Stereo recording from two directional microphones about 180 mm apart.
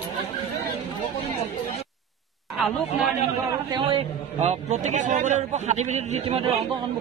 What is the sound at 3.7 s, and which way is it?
A man's voice, 30° right (ahead or behind).